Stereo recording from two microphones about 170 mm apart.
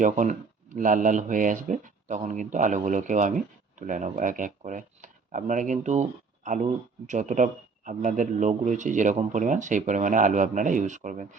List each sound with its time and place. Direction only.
0.0 s speech: 50° right (ahead or behind)